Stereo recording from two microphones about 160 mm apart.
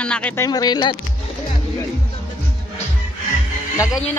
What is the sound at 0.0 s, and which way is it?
Speech, 10° left (ahead or behind).